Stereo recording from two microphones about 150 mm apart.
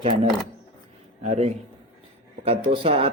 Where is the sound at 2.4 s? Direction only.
35° right (ahead or behind).